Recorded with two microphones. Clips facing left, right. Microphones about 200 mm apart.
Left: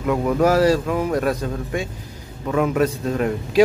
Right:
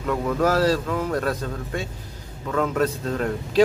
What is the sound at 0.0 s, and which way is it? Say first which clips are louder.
A man's voice: left 4 dB; 15° left (ahead or behind).